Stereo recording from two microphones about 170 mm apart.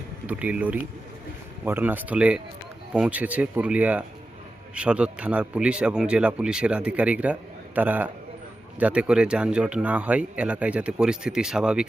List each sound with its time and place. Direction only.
0.3 s speech: 10° right (ahead or behind)